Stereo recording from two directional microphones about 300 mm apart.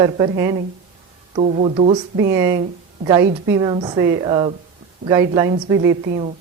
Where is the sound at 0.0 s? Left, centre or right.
Centre.